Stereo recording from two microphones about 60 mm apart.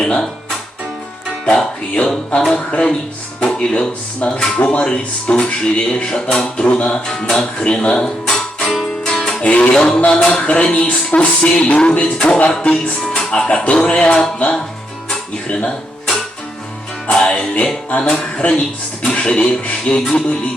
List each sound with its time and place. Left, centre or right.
0.0 s speech: centre
1.5 s speech: centre
4.6 s speech: centre
9.0 s music: centre
9.4 s speech: centre
10.2 s music: centre
13.1 s speech: centre
17.1 s music: centre
18.1 s speech: centre